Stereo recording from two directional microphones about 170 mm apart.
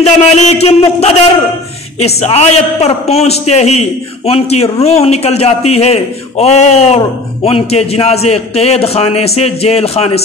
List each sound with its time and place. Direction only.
0.0 s a man's voice: 40° left (ahead or behind)